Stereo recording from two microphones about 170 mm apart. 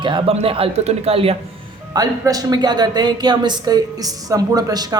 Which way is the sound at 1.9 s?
20° right (ahead or behind).